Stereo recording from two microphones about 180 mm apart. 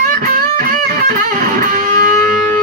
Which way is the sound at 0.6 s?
50° right (ahead or behind).